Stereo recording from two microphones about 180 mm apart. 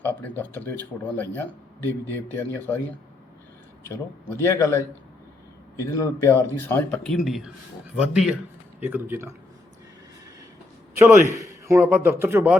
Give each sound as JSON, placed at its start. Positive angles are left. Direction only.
{"t": 0.0, "sound": "speech", "side_deg": 10}
{"t": 3.8, "sound": "speech", "side_deg": 15}
{"t": 5.8, "sound": "a man's voice", "side_deg": 15}
{"t": 10.9, "sound": "a man's voice", "side_deg": -15}